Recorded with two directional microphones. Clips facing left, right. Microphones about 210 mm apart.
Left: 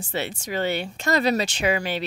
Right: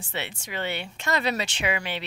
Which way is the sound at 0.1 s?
40° left (ahead or behind).